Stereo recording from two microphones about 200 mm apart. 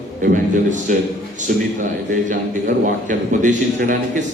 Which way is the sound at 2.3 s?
40° right (ahead or behind).